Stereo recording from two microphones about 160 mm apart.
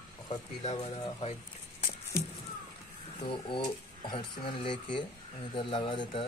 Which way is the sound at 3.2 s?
30° left (ahead or behind).